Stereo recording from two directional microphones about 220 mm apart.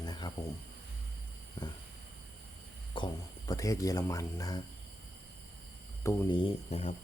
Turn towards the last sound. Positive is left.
turn(degrees=30)  # may be behind; listen again after turning